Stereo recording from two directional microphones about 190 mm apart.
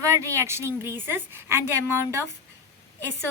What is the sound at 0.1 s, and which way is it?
A woman's voice, 15° right (ahead or behind).